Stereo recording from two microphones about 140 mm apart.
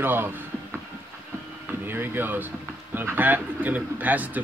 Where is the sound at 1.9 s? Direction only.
15° right (ahead or behind).